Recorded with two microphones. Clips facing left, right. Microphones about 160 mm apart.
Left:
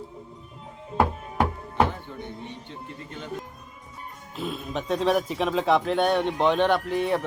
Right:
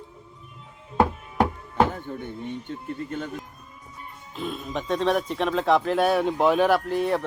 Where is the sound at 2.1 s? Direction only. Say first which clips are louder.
Right 4 dB; 45° right (ahead or behind).